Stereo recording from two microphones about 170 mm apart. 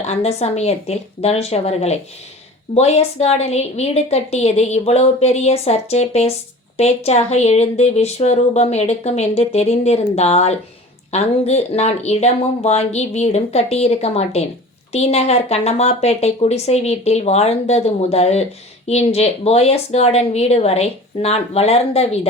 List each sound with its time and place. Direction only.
0.0 s speech: 40° left (ahead or behind)